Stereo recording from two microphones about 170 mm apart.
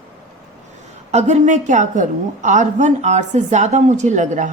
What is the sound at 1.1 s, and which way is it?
A woman's voice, 40° right (ahead or behind).